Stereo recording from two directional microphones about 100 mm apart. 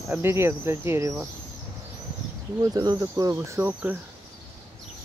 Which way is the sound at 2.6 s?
45° right (ahead or behind).